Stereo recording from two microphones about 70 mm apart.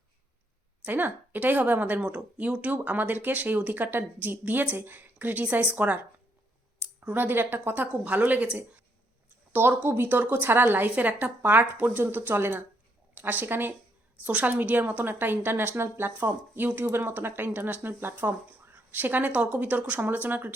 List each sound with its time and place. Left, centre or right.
0.9 s speech: right
9.5 s a woman's voice: right
14.3 s a woman's voice: centre; by 16.1 s right
16.2 s speech: right